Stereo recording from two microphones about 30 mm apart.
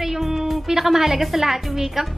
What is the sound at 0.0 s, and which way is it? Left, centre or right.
A woman's voice, centre.